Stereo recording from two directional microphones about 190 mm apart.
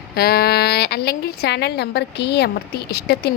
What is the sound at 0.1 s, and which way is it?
A woman's voice, 55° left (ahead or behind).